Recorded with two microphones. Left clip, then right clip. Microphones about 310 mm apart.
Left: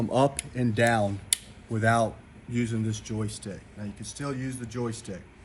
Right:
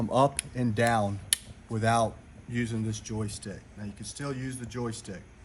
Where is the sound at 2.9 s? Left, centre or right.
Centre.